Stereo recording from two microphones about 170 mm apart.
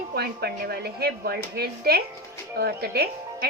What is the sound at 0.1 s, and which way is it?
A woman's voice, 70° right (ahead or behind).